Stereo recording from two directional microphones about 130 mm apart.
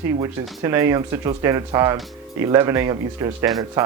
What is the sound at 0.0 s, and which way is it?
Speech, 20° right (ahead or behind).